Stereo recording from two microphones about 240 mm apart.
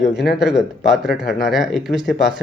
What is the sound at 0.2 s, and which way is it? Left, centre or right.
Speech, centre.